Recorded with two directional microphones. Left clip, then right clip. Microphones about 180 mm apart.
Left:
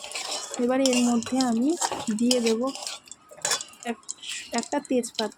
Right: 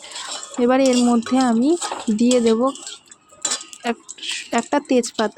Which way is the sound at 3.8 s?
40° right (ahead or behind).